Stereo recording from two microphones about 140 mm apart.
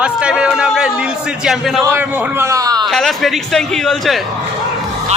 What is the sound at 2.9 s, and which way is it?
Speech, centre (ahead or behind).